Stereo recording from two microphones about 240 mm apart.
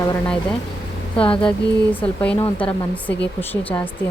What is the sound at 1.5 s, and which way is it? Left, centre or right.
Speech, centre.